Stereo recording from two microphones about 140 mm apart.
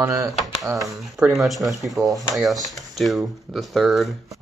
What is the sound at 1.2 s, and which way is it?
Speech, centre (ahead or behind).